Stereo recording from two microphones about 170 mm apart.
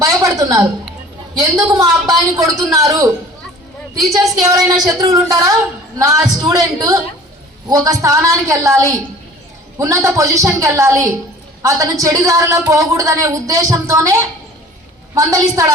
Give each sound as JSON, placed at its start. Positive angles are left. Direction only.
{"t": 0.0, "sound": "a sound", "side_deg": -20}
{"t": 1.5, "sound": "speech", "side_deg": -20}
{"t": 4.4, "sound": "speech", "side_deg": -25}